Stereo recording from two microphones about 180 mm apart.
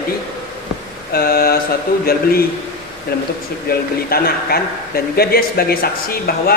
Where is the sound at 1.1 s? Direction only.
60° left (ahead or behind).